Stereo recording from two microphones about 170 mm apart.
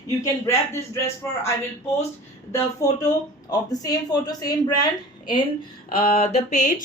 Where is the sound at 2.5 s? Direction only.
20° left (ahead or behind).